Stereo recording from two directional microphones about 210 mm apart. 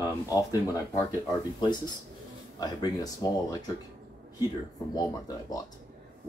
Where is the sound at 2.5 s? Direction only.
20° left (ahead or behind).